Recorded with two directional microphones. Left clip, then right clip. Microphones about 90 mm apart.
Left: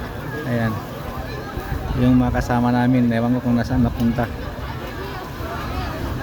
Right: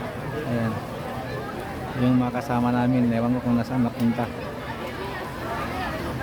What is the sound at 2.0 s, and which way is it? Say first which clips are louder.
Speech: left 5 dB; 50° left (ahead or behind).